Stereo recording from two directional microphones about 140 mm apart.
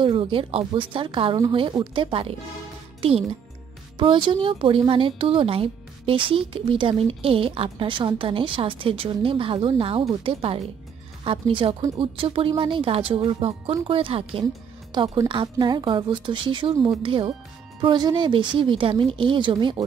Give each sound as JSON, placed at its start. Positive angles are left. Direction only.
{"t": 0.0, "sound": "a child's voice", "side_deg": -40}
{"t": 14.9, "sound": "speech", "side_deg": -30}